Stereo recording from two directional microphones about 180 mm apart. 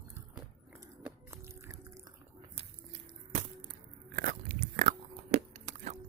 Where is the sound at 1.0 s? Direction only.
15° right (ahead or behind).